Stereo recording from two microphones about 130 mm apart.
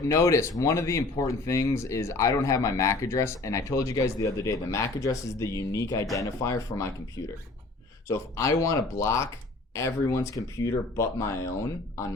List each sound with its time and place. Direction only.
0.1 s speech: 20° left (ahead or behind)
8.0 s speech: 25° left (ahead or behind)